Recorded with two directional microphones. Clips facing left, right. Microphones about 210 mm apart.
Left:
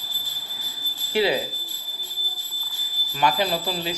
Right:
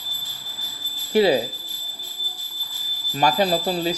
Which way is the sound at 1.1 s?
40° right (ahead or behind).